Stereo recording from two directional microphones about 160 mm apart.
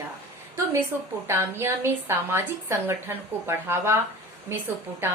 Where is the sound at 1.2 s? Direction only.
15° right (ahead or behind).